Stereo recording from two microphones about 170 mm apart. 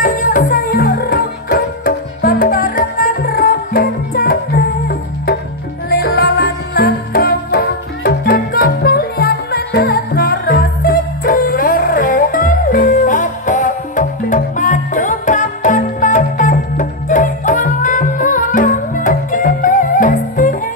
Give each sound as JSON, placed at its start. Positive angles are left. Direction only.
{"t": 0.0, "sound": "music", "side_deg": 55}